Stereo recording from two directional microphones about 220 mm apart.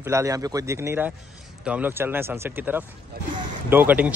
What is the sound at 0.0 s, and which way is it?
A man's voice, 15° right (ahead or behind).